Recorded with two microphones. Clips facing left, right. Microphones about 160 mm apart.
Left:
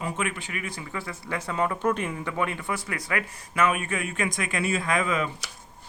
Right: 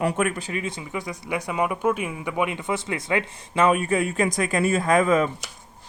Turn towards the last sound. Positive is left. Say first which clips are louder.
# right 7 dB
turn(degrees=-40)  # may be behind; listen again after turning